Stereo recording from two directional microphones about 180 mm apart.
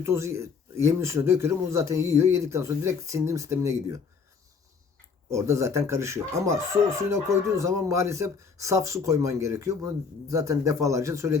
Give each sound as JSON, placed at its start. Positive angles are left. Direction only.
{"t": 0.0, "sound": "speech", "side_deg": -15}
{"t": 5.3, "sound": "speech", "side_deg": -15}